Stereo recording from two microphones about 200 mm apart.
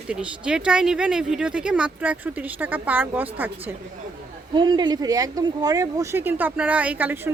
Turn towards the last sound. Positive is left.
turn(degrees=-10)  # may be behind; listen again after turning